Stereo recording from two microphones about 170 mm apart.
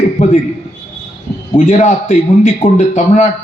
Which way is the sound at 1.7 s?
45° left (ahead or behind).